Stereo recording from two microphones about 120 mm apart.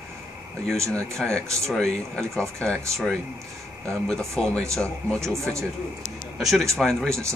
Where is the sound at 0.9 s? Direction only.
10° left (ahead or behind).